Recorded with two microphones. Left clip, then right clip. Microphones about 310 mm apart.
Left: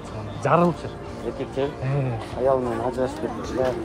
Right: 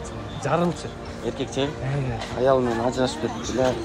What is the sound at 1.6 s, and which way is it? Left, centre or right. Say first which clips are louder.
Speech: left 4 dB; right.